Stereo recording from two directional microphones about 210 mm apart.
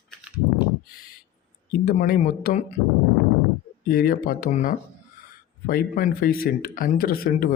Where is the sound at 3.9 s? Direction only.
45° left (ahead or behind).